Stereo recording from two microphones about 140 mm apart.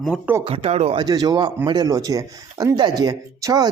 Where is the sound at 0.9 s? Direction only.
30° right (ahead or behind).